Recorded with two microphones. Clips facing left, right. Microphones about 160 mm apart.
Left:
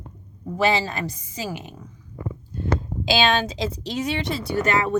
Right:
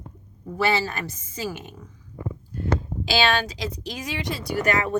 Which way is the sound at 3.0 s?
20° left (ahead or behind).